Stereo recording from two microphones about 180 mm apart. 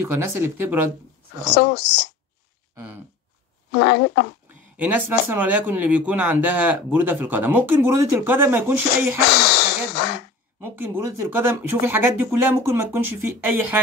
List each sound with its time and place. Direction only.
0.0 s speech: 15° right (ahead or behind)
1.4 s speech: 65° left (ahead or behind)
2.7 s speech: 10° right (ahead or behind)
3.7 s speech: 70° left (ahead or behind)
4.7 s speech: 10° right (ahead or behind)
9.3 s speech: 70° left (ahead or behind)
10.6 s speech: 10° right (ahead or behind)